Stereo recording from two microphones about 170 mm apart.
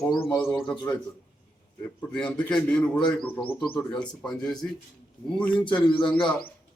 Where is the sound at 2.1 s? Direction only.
5° left (ahead or behind).